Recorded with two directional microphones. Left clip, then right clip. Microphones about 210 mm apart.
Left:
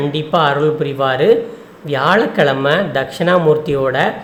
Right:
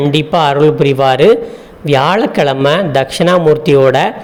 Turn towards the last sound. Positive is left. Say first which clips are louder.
# right 7 dB
turn(degrees=-30)  # may be behind; listen again after turning